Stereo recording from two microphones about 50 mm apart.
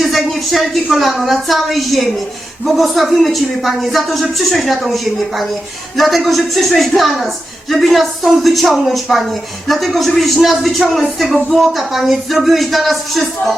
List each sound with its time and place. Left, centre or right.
0.0 s speech: centre